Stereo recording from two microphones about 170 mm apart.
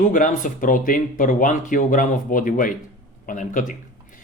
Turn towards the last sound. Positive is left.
turn(degrees=50)  # may be behind; listen again after turning